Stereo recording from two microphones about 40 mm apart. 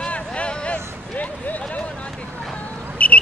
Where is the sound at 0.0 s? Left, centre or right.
Left.